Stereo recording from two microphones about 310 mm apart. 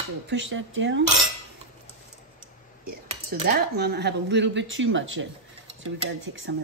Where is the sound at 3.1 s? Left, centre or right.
Right.